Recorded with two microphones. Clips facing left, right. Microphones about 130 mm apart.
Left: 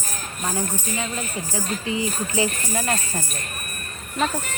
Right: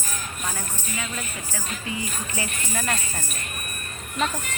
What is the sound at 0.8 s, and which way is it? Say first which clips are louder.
Speech: left 4 dB; 40° left (ahead or behind).